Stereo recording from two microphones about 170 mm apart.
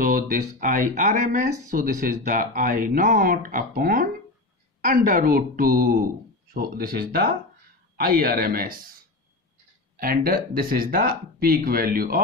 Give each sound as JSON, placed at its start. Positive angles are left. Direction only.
{"t": 0.0, "sound": "speech", "side_deg": -55}
{"t": 9.9, "sound": "speech", "side_deg": -60}